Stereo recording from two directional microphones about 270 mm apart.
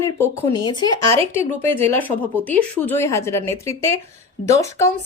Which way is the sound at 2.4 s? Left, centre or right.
Centre.